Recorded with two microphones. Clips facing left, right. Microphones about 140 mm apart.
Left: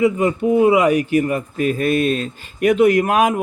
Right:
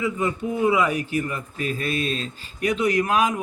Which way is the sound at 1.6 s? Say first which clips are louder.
Left 9 dB; 55° left (ahead or behind).